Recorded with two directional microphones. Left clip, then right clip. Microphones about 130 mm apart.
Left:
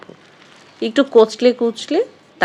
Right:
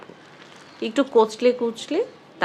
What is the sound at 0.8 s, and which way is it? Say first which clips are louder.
Speech: left 6 dB; 45° left (ahead or behind).